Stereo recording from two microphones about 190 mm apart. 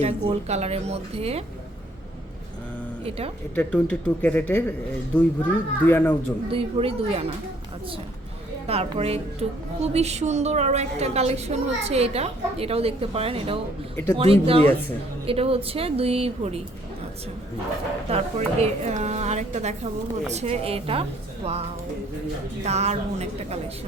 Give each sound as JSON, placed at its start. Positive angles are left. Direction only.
{"t": 0.0, "sound": "a woman's voice", "side_deg": -35}
{"t": 3.0, "sound": "a woman's voice", "side_deg": -30}
{"t": 3.5, "sound": "speech", "side_deg": 5}
{"t": 6.5, "sound": "a woman's voice", "side_deg": -30}
{"t": 8.6, "sound": "a woman's voice", "side_deg": -30}
{"t": 13.9, "sound": "speech", "side_deg": 10}
{"t": 14.2, "sound": "a woman's voice", "side_deg": -30}
{"t": 18.1, "sound": "a woman's voice", "side_deg": -35}
{"t": 22.6, "sound": "a woman's voice", "side_deg": -35}